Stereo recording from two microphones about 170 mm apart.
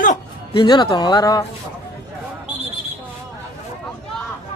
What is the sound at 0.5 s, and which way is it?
Speech, 25° left (ahead or behind).